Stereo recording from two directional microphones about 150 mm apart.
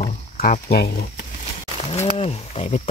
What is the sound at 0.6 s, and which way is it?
Speech, 90° left.